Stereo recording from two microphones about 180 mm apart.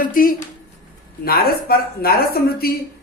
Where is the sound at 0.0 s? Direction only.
50° left (ahead or behind).